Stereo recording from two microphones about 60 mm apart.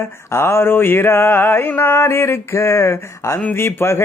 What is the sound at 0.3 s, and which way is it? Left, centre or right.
Mantra, left.